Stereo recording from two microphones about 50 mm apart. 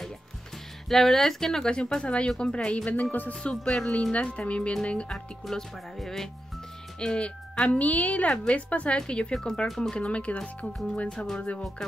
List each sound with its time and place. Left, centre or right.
0.8 s speech: centre; by 3.3 s left
3.4 s a woman's voice: centre
5.1 s a woman's voice: centre
9.9 s a woman's voice: left
11.1 s speech: centre